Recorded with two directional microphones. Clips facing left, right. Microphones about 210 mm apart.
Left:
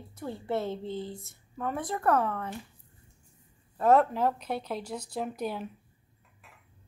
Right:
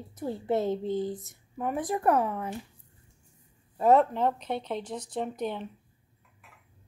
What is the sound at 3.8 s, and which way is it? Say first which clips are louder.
Speech: right 1 dB; centre (ahead or behind).